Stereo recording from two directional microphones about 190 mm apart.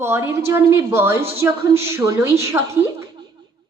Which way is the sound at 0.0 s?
15° right (ahead or behind).